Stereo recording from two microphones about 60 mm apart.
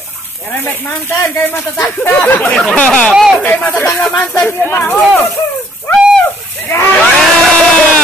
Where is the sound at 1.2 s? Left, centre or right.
Left.